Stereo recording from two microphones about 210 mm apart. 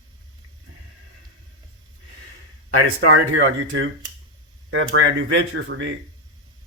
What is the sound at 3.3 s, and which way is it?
Speech, 70° right (ahead or behind).